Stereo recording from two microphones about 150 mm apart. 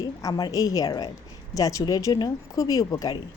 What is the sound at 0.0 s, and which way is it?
Speech, 25° left (ahead or behind).